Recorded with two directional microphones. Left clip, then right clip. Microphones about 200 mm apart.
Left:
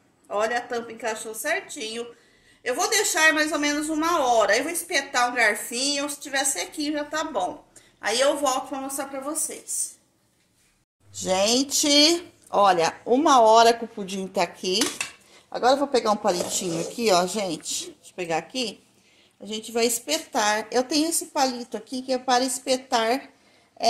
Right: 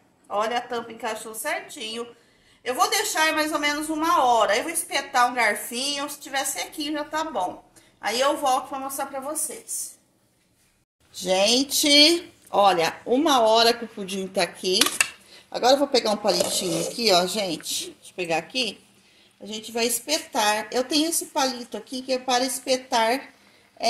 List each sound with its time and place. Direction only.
0.3 s speech: 40° left (ahead or behind)
11.1 s speech: 5° left (ahead or behind)
15.5 s a woman's voice: 10° right (ahead or behind)